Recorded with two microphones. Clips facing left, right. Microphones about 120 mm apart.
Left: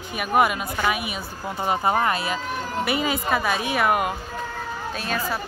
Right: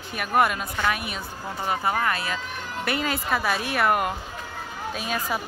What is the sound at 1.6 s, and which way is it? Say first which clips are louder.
Speech: left 3 dB; 20° left (ahead or behind).